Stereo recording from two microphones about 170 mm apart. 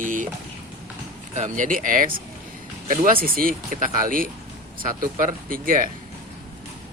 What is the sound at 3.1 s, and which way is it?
Speech, 55° right (ahead or behind).